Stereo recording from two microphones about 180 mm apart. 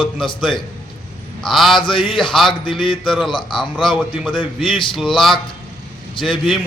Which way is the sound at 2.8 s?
Centre (ahead or behind).